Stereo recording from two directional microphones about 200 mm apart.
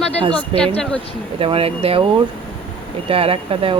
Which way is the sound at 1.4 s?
30° right (ahead or behind).